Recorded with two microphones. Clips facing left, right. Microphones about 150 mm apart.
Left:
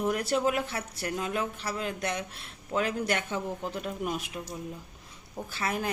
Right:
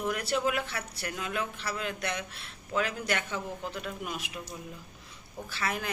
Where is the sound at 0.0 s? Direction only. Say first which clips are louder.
Left 3 dB; 45° left (ahead or behind).